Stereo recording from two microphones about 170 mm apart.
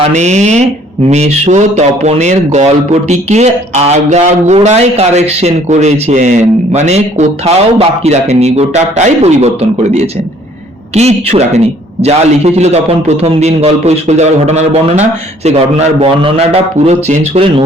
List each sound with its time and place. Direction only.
0.1 s speech: 40° right (ahead or behind)